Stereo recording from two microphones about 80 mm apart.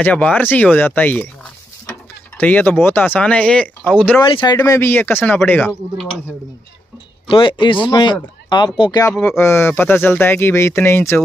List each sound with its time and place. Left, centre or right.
0.0 s speech: centre
2.3 s speech: left
4.2 s speech: left
4.7 s speech: left
7.3 s speech: left
9.4 s speech: left